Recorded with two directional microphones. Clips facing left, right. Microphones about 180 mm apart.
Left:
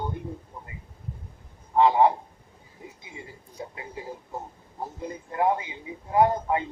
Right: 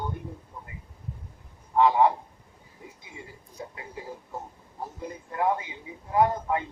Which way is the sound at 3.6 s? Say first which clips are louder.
Left 2 dB; 25° left (ahead or behind).